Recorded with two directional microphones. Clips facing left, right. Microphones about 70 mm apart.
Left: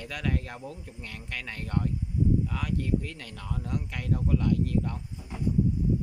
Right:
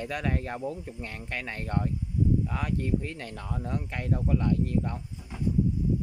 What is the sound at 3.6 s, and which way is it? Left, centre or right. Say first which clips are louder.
Speech: right 1 dB; right.